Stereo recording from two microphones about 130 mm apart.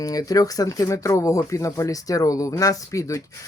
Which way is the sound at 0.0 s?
30° left (ahead or behind).